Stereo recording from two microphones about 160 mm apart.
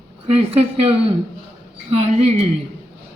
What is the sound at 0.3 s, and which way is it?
A man's voice, 40° right (ahead or behind).